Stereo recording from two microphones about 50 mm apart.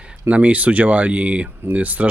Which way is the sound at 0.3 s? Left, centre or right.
Right.